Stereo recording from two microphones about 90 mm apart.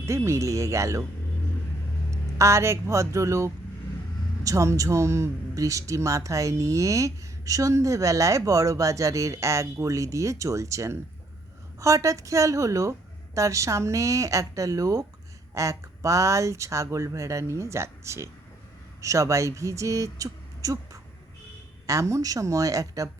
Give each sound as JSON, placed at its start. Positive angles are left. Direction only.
{"t": 0.3, "sound": "speech", "side_deg": -35}
{"t": 2.0, "sound": "speech", "side_deg": -35}